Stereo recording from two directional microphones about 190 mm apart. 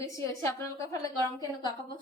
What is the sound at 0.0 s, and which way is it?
A woman's voice, 15° left (ahead or behind).